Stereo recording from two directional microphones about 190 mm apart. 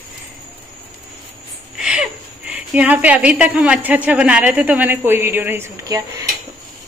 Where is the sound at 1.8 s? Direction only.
5° right (ahead or behind).